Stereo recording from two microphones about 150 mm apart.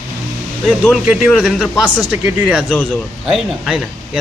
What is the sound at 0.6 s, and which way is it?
A man's voice, 5° right (ahead or behind).